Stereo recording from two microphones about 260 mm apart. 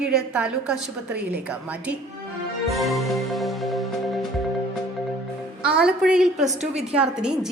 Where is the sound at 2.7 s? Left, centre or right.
Centre.